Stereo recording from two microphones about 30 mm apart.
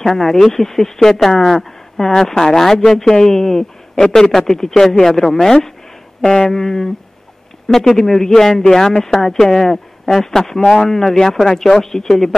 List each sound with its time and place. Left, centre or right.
0.0 s speech: centre